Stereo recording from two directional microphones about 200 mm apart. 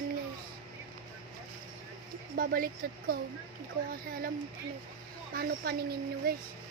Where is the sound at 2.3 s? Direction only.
45° right (ahead or behind).